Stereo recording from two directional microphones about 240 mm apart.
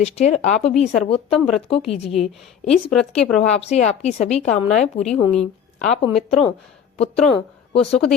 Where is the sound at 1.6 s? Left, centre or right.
Left.